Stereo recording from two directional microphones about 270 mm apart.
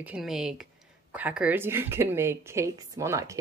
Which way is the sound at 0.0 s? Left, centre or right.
Centre.